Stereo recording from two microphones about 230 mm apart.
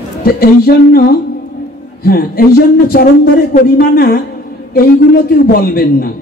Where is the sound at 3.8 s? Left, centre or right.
Left.